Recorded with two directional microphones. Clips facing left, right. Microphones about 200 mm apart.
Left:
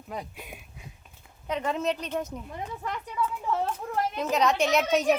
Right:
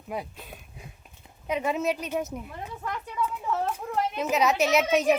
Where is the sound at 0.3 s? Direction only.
10° left (ahead or behind).